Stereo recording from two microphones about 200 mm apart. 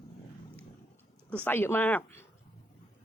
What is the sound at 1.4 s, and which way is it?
Speech, 10° left (ahead or behind).